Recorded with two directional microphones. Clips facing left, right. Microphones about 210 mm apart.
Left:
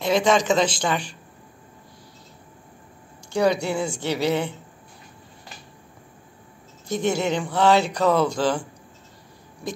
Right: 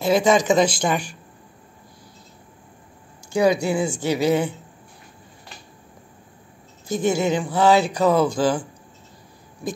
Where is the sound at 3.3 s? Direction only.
10° right (ahead or behind).